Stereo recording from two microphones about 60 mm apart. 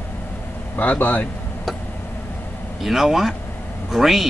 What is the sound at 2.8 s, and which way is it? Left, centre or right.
A man's voice, centre.